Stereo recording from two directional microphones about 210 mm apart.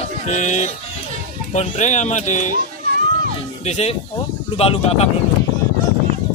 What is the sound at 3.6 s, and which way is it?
Speech, 30° left (ahead or behind).